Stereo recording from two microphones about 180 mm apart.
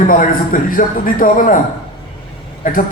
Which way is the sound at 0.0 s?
45° left (ahead or behind).